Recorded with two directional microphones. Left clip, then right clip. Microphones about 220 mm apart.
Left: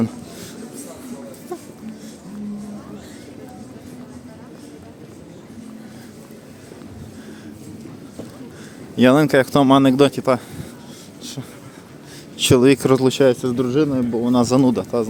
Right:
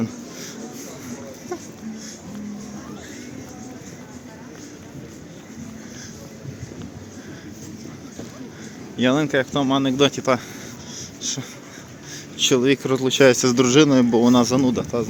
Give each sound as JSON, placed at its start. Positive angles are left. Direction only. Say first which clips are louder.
{"t": 9.0, "sound": "speech", "louder": "left 6 dB", "side_deg": 30}
{"t": 10.1, "sound": "speech", "louder": "left 2 dB", "side_deg": 15}
{"t": 11.2, "sound": "a sound", "louder": "right 6 dB", "side_deg": 10}
{"t": 12.4, "sound": "speech", "louder": "left 4 dB", "side_deg": 30}
{"t": 13.1, "sound": "speech", "louder": "right 2 dB", "side_deg": 0}
{"t": 14.3, "sound": "speech", "louder": "left 2 dB", "side_deg": 20}